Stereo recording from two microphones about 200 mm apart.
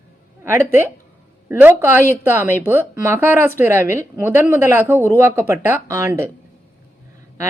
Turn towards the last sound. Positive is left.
turn(degrees=-15)  # may be behind; listen again after turning